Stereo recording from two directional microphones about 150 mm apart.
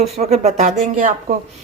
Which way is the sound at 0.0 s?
45° right (ahead or behind).